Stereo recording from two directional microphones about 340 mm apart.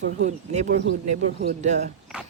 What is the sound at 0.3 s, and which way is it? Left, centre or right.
Speech, right.